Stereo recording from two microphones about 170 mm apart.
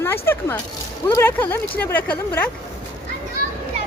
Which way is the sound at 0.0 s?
15° left (ahead or behind).